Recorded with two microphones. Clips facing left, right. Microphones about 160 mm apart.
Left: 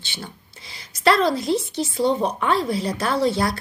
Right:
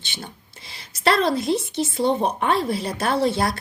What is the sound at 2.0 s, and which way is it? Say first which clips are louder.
Speech: even; 55° right (ahead or behind).